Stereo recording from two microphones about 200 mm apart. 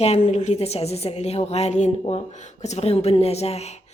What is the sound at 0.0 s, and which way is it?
A woman's voice, 30° left (ahead or behind).